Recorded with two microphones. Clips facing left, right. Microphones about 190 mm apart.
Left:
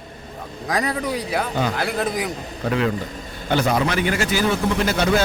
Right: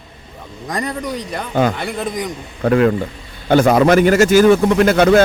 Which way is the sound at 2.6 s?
50° right (ahead or behind).